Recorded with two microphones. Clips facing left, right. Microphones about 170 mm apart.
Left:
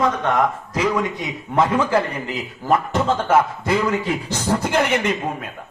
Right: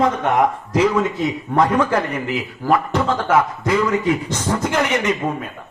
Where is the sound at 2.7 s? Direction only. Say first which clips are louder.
Even; 25° left (ahead or behind).